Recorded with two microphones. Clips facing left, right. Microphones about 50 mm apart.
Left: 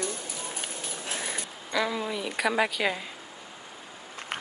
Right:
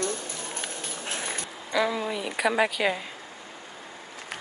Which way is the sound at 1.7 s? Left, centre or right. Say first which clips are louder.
Right 2 dB; centre.